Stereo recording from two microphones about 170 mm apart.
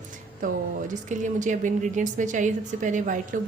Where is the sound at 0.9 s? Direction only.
45° right (ahead or behind).